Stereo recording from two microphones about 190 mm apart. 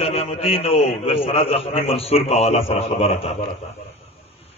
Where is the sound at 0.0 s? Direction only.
30° left (ahead or behind).